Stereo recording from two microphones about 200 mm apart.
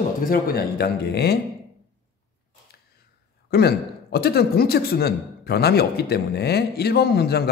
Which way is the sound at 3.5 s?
50° left (ahead or behind).